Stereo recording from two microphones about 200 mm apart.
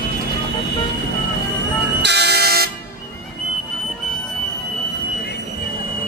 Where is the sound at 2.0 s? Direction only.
55° right (ahead or behind).